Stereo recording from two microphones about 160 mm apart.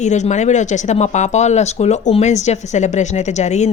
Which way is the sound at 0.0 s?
45° left (ahead or behind).